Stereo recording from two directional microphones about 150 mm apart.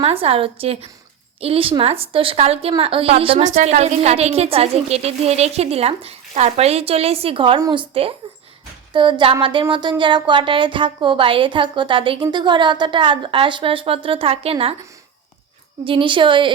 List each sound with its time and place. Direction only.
0.0 s a woman's voice: 40° right (ahead or behind)
3.4 s a woman's voice: 55° right (ahead or behind)
15.8 s a woman's voice: 35° right (ahead or behind)